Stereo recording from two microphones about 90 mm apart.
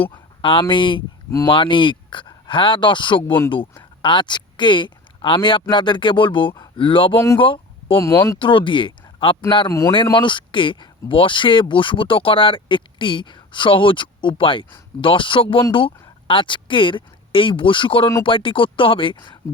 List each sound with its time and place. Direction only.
0.1 s a sound: 75° left (ahead or behind)
0.7 s speech: 65° left (ahead or behind)
7.3 s a sound: 70° left (ahead or behind)
7.9 s speech: 30° left (ahead or behind)
8.4 s speech: 70° left (ahead or behind)
9.6 s speech: 35° left (ahead or behind)
9.9 s speech: 70° left (ahead or behind)